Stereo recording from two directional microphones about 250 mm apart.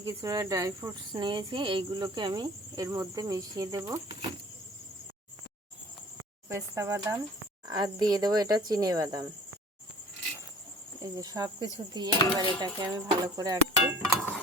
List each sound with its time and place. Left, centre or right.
0.0 s speech: centre
6.5 s speech: centre
11.0 s speech: centre